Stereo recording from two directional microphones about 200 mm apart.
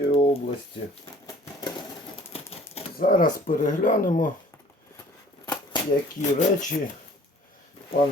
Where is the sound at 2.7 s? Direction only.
40° left (ahead or behind).